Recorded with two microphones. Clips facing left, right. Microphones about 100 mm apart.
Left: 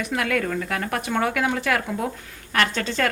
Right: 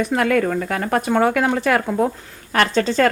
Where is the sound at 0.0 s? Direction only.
35° right (ahead or behind).